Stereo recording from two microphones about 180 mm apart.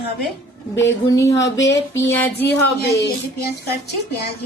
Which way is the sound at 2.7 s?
60° left (ahead or behind).